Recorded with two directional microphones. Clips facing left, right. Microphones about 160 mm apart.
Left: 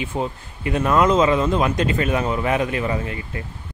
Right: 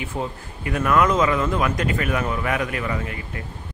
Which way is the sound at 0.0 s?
20° left (ahead or behind).